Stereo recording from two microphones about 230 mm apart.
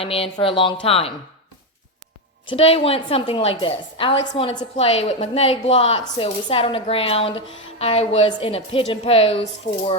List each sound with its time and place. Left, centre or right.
0.0 s a woman's voice: left
2.5 s a woman's voice: left